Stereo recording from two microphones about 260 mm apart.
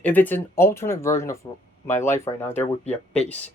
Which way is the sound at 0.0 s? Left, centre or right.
Centre.